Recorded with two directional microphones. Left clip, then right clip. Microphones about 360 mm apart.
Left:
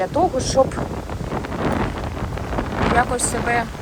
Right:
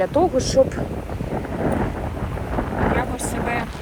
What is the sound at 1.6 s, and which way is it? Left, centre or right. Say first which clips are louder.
Wind noise: even; centre.